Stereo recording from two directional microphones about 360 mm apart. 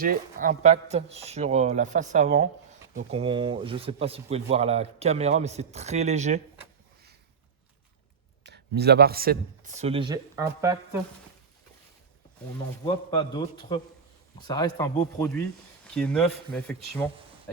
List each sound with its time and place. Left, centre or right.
0.0 s speech: right
8.4 s speech: right; by 10.8 s centre
12.8 s a man's voice: centre